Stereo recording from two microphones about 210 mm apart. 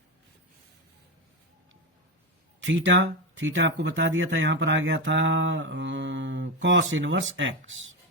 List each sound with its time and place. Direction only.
2.6 s speech: 65° right (ahead or behind)